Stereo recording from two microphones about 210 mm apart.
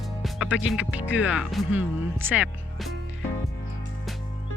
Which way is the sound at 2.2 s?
10° right (ahead or behind).